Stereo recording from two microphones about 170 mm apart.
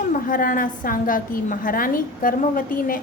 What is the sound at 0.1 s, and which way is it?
A woman's voice, 55° left (ahead or behind).